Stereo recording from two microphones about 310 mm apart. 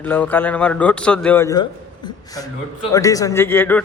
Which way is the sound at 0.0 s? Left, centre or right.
Centre.